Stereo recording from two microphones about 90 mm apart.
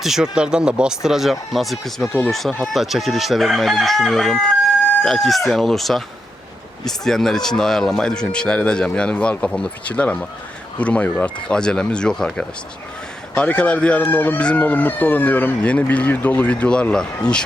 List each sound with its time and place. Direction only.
0.0 s speech: 5° right (ahead or behind)